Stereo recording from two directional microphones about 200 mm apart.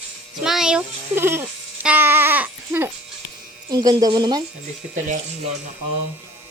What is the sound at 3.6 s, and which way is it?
Speech, 20° right (ahead or behind).